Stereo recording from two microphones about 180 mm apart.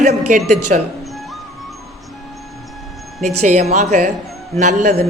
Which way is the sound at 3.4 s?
40° right (ahead or behind).